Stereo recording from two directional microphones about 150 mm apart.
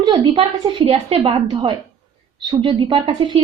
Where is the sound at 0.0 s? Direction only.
35° right (ahead or behind).